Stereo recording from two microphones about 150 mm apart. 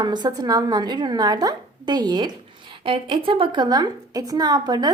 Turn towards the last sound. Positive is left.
turn(degrees=-25)  # may be behind; listen again after turning